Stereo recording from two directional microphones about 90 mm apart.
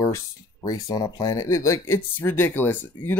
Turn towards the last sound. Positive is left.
turn(degrees=20)  # may be behind; listen again after turning